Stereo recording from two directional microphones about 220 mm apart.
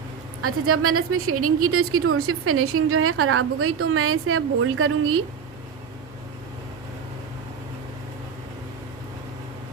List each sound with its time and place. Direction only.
0.4 s a woman's voice: 80° right